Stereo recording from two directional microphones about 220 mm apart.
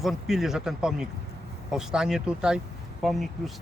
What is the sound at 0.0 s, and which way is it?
Speech, centre (ahead or behind).